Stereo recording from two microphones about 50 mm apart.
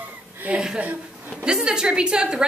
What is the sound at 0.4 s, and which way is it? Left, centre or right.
Speech, right.